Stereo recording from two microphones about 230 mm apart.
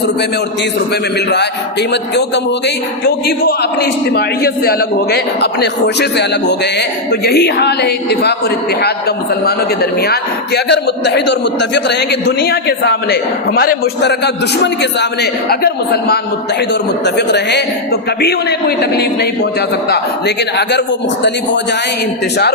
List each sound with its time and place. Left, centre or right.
1.9 s a man's voice: left
18.8 s a man's voice: left